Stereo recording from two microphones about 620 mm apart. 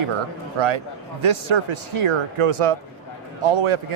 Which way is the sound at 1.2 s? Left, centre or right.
Right.